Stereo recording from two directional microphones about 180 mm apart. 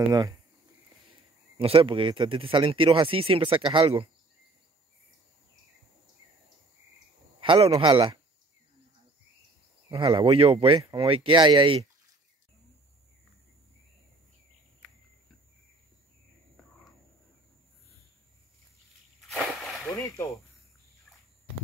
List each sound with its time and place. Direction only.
0.1 s speech: 20° right (ahead or behind)
1.6 s speech: 30° right (ahead or behind)
7.3 s a man's voice: 30° right (ahead or behind)
9.8 s speech: 30° right (ahead or behind)
19.2 s a sound: centre (ahead or behind)
19.9 s a sound: 15° left (ahead or behind)